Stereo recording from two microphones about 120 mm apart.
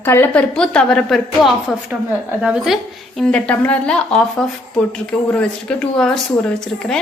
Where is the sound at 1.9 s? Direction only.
10° right (ahead or behind).